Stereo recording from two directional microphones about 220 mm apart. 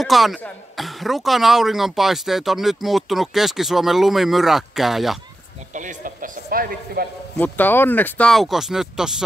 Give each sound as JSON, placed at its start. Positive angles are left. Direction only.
{"t": 0.0, "sound": "speech", "side_deg": 0}
{"t": 5.8, "sound": "speech", "side_deg": -35}
{"t": 7.3, "sound": "speech", "side_deg": 10}